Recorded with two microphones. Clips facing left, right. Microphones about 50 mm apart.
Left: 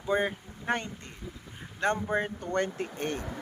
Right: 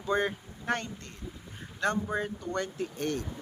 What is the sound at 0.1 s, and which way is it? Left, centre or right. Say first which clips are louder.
Speech: left 1 dB; centre.